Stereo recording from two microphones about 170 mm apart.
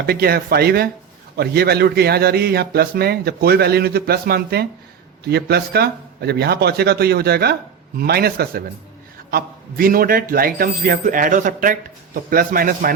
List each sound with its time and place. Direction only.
0.0 s a man's voice: 65° right (ahead or behind)